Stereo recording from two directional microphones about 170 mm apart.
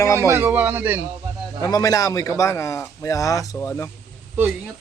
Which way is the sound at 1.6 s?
20° left (ahead or behind).